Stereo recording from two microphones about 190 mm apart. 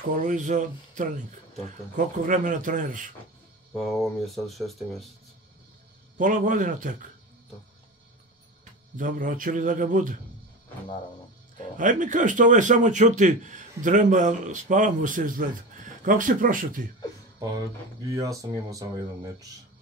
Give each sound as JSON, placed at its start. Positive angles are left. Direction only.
{"t": 0.1, "sound": "a man's voice", "side_deg": -40}
{"t": 2.2, "sound": "a man's voice", "side_deg": -45}
{"t": 3.7, "sound": "speech", "side_deg": 0}
{"t": 6.1, "sound": "a man's voice", "side_deg": -45}
{"t": 8.9, "sound": "a man's voice", "side_deg": -45}
{"t": 11.7, "sound": "a man's voice", "side_deg": -45}
{"t": 18.1, "sound": "speech", "side_deg": -15}